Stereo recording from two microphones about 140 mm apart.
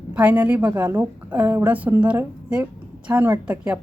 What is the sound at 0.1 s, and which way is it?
A woman's voice, 10° right (ahead or behind).